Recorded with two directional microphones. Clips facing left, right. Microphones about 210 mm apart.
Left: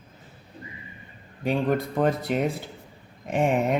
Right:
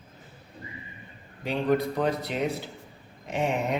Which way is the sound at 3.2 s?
50° left (ahead or behind).